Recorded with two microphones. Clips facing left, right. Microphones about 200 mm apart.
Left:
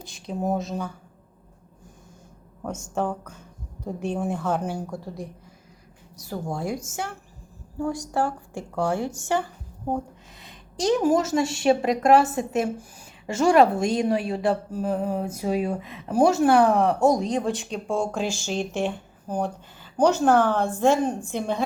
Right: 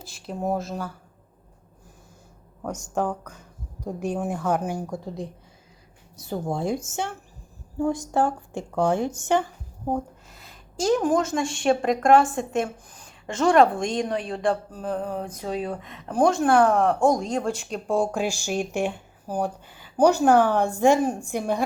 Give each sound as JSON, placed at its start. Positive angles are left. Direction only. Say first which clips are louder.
{"t": 0.0, "sound": "a woman's voice", "louder": "left 1 dB", "side_deg": 0}
{"t": 2.9, "sound": "a woman's voice", "louder": "right 1 dB", "side_deg": -10}
{"t": 5.0, "sound": "a woman's voice", "louder": "right 2 dB", "side_deg": -20}
{"t": 10.3, "sound": "a woman's voice", "louder": "right 2 dB", "side_deg": 0}